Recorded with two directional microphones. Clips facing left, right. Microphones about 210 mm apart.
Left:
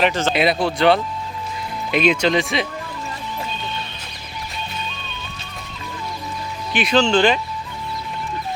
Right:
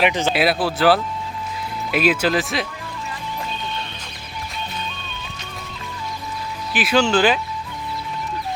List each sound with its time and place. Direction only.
0.0 s speech: 15° right (ahead or behind)
0.3 s speech: 5° right (ahead or behind)
6.7 s speech: 5° right (ahead or behind)